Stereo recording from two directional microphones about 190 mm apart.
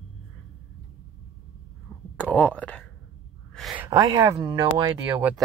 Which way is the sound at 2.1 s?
5° left (ahead or behind).